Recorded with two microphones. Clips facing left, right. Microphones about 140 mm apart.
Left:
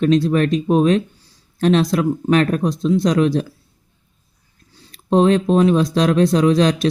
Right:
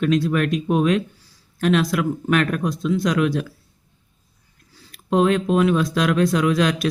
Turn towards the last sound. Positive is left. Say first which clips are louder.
# left 4 dB
turn(degrees=30)  # may be behind; listen again after turning